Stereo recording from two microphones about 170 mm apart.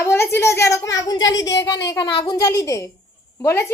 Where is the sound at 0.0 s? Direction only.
15° left (ahead or behind).